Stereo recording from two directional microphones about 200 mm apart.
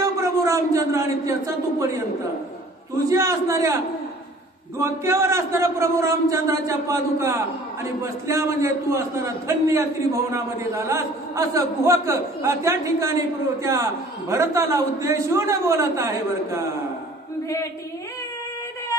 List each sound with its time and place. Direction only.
0.2 s a man's voice: 15° right (ahead or behind)
3.1 s a man's voice: 15° right (ahead or behind)
4.7 s a man's voice: 15° right (ahead or behind)